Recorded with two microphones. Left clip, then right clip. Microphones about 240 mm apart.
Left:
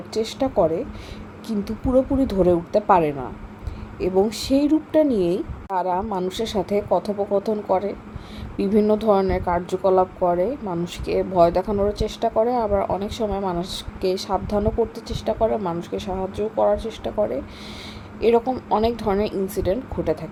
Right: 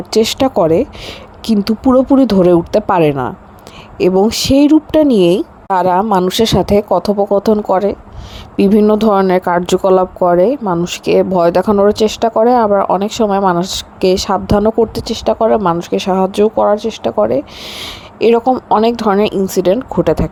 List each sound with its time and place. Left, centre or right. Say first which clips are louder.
0.1 s speech: right 11 dB; right